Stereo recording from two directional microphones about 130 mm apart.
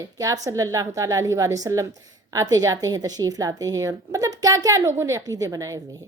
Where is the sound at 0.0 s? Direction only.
25° right (ahead or behind).